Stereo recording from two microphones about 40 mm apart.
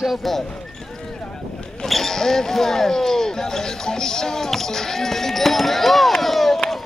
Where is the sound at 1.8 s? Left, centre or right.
Centre.